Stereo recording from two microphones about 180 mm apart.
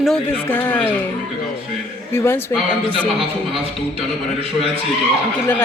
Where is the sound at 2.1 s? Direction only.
15° left (ahead or behind).